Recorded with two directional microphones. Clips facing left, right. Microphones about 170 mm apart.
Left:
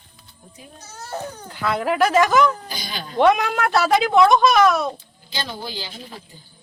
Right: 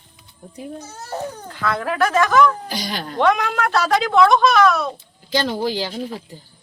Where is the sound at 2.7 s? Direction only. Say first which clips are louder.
Right 5 dB; 75° right (ahead or behind).